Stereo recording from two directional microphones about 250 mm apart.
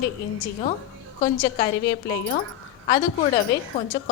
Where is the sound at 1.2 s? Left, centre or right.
Left.